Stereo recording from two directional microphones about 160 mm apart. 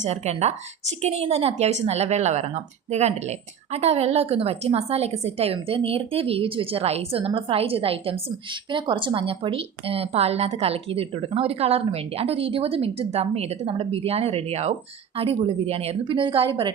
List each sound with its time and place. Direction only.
0.0 s a woman's voice: 45° right (ahead or behind)